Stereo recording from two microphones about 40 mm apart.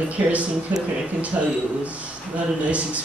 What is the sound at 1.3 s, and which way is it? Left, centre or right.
Speech, right.